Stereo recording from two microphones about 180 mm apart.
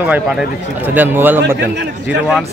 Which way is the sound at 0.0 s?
10° right (ahead or behind).